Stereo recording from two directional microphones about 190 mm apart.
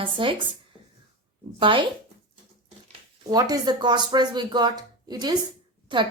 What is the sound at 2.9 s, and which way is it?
A woman's voice, 20° right (ahead or behind).